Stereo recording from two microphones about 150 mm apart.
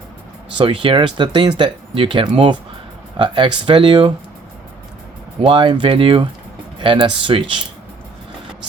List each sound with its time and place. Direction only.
0.6 s speech: 35° right (ahead or behind)
5.5 s speech: 35° right (ahead or behind)